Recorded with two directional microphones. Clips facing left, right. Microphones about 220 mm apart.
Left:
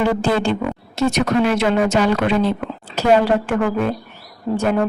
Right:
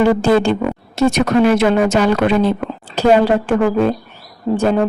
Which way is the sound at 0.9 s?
45° right (ahead or behind).